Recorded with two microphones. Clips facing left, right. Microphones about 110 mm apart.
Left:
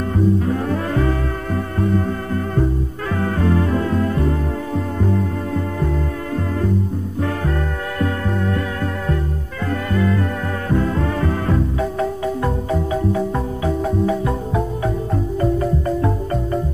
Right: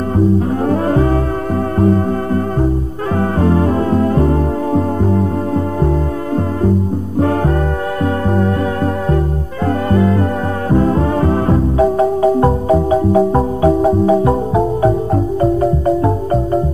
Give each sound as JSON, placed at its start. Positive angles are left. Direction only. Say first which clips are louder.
{"t": 0.5, "sound": "music", "louder": "right 6 dB", "side_deg": -35}
{"t": 9.7, "sound": "music", "louder": "right 6 dB", "side_deg": -35}